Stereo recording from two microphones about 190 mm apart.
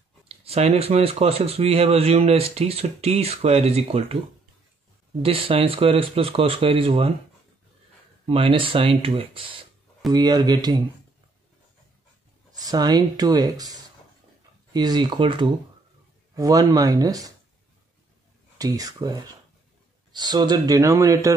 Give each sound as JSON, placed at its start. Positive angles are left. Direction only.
{"t": 0.5, "sound": "speech", "side_deg": -30}
{"t": 5.2, "sound": "speech", "side_deg": -30}
{"t": 8.3, "sound": "speech", "side_deg": -30}
{"t": 12.5, "sound": "speech", "side_deg": -20}
{"t": 18.6, "sound": "speech", "side_deg": -20}